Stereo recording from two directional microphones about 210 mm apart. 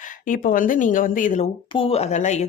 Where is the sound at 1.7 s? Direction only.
25° left (ahead or behind).